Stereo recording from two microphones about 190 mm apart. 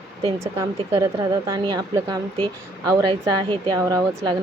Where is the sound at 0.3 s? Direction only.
15° right (ahead or behind).